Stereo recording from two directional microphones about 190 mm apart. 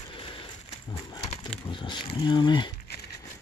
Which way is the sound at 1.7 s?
25° left (ahead or behind).